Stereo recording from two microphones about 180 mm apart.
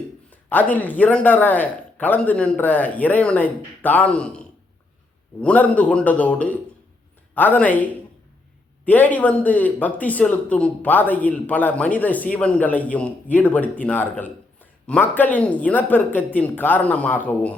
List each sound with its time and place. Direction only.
0.3 s a man's voice: 10° left (ahead or behind)
8.8 s a man's voice: 10° left (ahead or behind)